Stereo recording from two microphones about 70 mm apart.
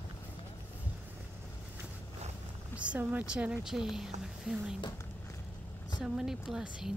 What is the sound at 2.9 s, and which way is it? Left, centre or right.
Speech, centre.